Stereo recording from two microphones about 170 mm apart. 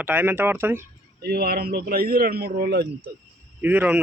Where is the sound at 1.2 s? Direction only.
70° right (ahead or behind).